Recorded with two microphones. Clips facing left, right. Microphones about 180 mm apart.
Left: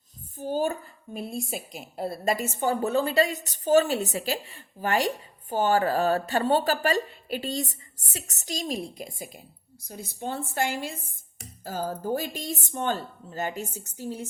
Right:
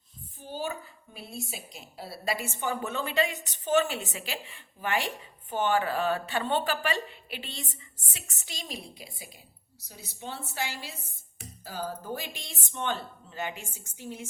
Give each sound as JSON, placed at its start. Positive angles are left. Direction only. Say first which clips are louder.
{"t": 0.3, "sound": "a woman's voice", "louder": "left 8 dB", "side_deg": 45}